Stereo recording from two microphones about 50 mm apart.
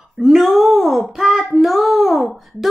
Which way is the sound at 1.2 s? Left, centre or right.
Centre.